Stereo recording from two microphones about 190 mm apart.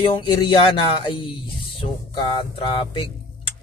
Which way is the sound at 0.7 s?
25° left (ahead or behind).